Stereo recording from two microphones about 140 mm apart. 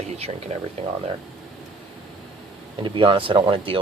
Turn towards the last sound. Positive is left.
turn(degrees=-40)  # may be behind; listen again after turning